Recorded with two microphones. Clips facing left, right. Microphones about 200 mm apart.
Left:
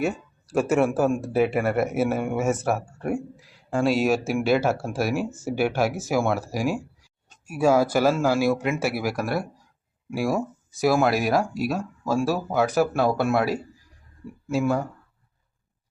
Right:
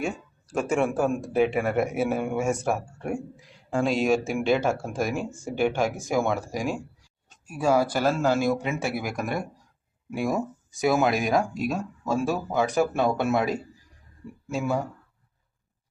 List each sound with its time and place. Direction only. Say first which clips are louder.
0.0 s speech: left 4 dB; 5° left (ahead or behind)